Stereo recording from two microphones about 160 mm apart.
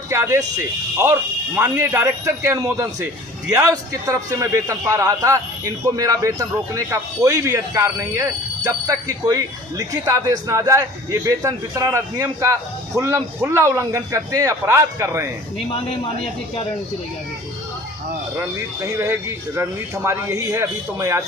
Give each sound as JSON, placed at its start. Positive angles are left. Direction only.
{"t": 0.1, "sound": "a man's voice", "side_deg": -20}
{"t": 18.3, "sound": "a man's voice", "side_deg": -15}